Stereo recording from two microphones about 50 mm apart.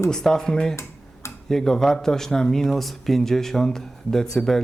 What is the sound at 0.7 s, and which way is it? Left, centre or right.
Tick-tock, left.